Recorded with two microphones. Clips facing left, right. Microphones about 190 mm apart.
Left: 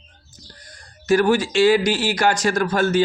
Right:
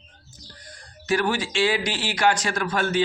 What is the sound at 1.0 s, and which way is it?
Speech, 40° left (ahead or behind).